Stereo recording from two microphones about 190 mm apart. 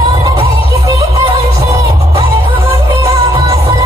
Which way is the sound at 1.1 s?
20° right (ahead or behind).